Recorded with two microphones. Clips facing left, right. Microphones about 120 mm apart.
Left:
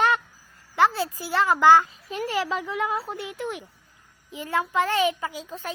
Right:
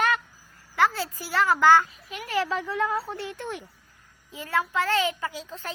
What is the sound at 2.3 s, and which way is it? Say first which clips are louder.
A child's voice: right 2 dB; 20° left (ahead or behind).